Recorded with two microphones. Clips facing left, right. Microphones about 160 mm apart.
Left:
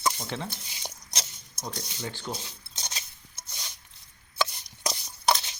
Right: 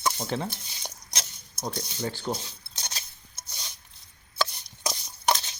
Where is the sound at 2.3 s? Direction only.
40° right (ahead or behind).